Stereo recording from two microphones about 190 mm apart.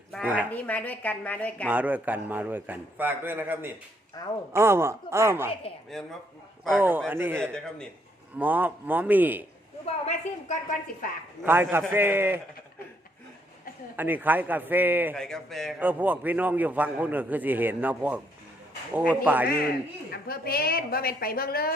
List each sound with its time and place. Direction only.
0.5 s speech: 10° left (ahead or behind)
1.6 s a man's voice: 10° right (ahead or behind)
5.9 s speech: centre (ahead or behind)
6.7 s a man's voice: 10° right (ahead or behind)
7.5 s speech: 5° left (ahead or behind)
8.4 s a man's voice: 10° right (ahead or behind)
9.8 s speech: 35° left (ahead or behind)
11.4 s a man's voice: 10° right (ahead or behind)
13.9 s a man's voice: 10° right (ahead or behind)
15.1 s speech: 5° left (ahead or behind)
15.8 s a man's voice: 10° right (ahead or behind)
20.1 s a woman's voice: 50° left (ahead or behind)